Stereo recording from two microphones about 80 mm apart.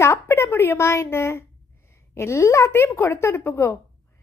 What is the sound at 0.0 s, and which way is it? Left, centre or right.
A woman's voice, left.